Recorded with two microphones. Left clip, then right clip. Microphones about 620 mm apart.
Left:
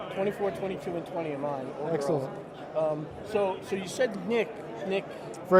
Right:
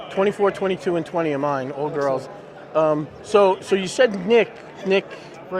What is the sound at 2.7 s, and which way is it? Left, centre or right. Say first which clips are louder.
Speech: right 10 dB; right.